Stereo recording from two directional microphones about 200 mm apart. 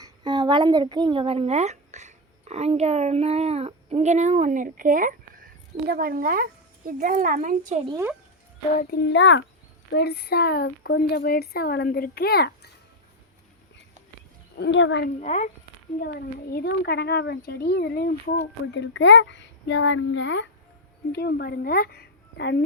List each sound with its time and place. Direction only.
0.0 s a child's voice: 20° right (ahead or behind); by 7.8 s 40° right (ahead or behind)
8.8 s a child's voice: 55° left (ahead or behind)
9.9 s speech: 55° left (ahead or behind)
14.6 s a child's voice: 65° left (ahead or behind)
15.2 s speech: 35° left (ahead or behind)
16.0 s speech: 50° left (ahead or behind)
18.7 s a woman's voice: 70° left (ahead or behind)